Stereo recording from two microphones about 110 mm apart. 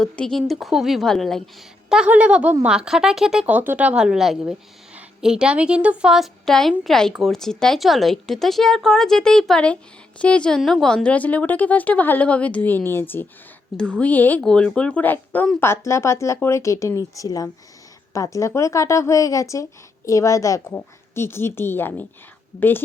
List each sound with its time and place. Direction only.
0.0 s speech: 5° left (ahead or behind)
1.9 s speech: 10° right (ahead or behind)
3.4 s a woman's voice: 15° right (ahead or behind); by 22.0 s 20° left (ahead or behind)